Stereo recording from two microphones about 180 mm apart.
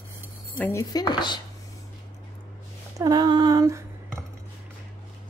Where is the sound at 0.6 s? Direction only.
15° left (ahead or behind).